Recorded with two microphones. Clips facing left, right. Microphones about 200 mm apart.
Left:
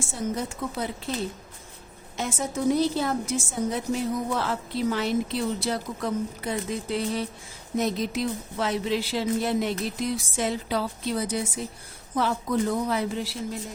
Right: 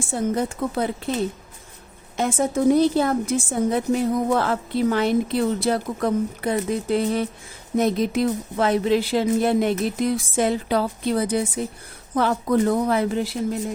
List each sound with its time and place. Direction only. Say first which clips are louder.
0.1 s a woman's voice: right 8 dB; 55° right (ahead or behind)
2.1 s a woman's voice: right 8 dB; 55° right (ahead or behind)